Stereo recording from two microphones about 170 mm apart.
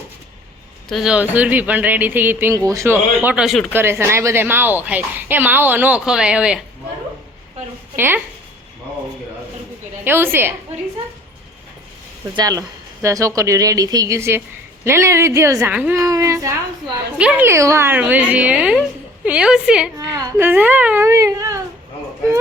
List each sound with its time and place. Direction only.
0.9 s speech: centre (ahead or behind)
3.2 s a woman's voice: 5° right (ahead or behind)
3.7 s speech: 15° right (ahead or behind)
7.9 s speech: 10° right (ahead or behind)
10.0 s speech: 15° right (ahead or behind)
12.3 s a woman's voice: 20° right (ahead or behind); by 19.9 s 5° right (ahead or behind)
20.0 s speech: 20° right (ahead or behind)